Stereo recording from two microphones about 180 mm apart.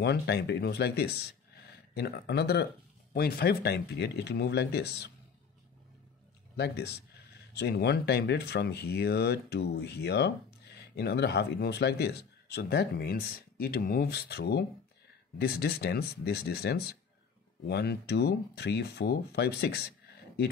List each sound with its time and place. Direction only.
0.0 s speech: 65° left (ahead or behind)
6.5 s speech: 65° left (ahead or behind)